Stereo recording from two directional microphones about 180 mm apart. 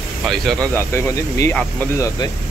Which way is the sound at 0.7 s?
15° left (ahead or behind).